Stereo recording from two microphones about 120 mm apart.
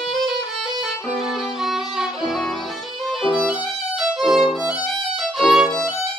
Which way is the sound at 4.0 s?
Centre (ahead or behind).